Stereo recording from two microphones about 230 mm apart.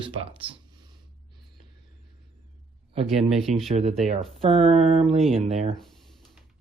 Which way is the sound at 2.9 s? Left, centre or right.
Right.